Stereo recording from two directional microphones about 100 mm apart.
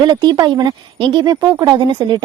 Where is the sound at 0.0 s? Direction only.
50° right (ahead or behind).